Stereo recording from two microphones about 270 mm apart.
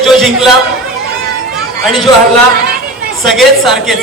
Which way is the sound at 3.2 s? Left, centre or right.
Centre.